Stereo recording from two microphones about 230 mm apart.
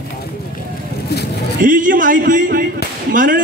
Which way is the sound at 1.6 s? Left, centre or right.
Right.